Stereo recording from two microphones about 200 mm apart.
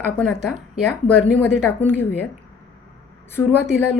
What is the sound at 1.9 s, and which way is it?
Speech, 10° left (ahead or behind).